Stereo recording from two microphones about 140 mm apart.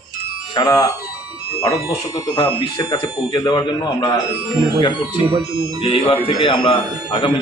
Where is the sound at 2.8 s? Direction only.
25° left (ahead or behind).